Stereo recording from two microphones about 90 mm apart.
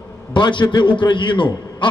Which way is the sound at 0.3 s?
60° left (ahead or behind).